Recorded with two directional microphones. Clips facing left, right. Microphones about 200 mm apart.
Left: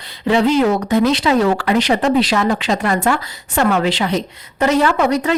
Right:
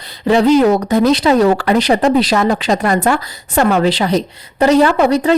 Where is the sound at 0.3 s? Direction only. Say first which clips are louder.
Right 4 dB; 40° right (ahead or behind).